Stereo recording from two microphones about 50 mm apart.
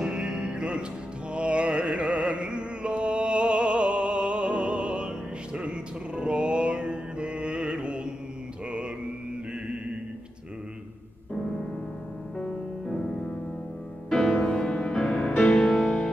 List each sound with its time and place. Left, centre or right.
0.0 s music: centre
12.4 s music: centre
14.1 s music: centre